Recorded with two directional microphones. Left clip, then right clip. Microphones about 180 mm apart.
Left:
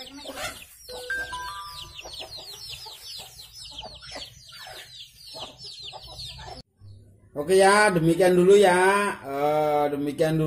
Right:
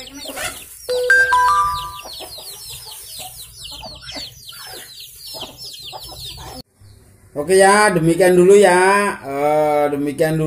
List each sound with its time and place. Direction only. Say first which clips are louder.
1.0 s music: right 19 dB; 30° right (ahead or behind)
2.2 s chicken: right 6 dB; 25° right (ahead or behind)
7.3 s speech: right 6 dB; centre (ahead or behind)